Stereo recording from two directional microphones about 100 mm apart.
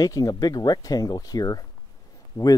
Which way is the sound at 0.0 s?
40° left (ahead or behind).